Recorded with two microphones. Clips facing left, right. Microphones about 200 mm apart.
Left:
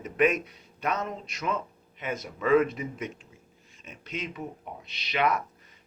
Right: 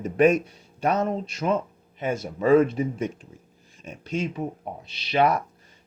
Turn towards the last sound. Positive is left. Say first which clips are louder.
# right 5 dB
turn(degrees=-30)  # may be behind; listen again after turning